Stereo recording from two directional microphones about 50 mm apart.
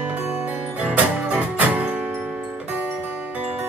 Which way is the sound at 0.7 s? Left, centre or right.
Right.